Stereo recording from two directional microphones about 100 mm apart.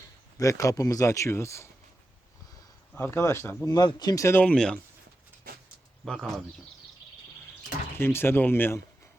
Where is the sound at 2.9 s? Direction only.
20° left (ahead or behind).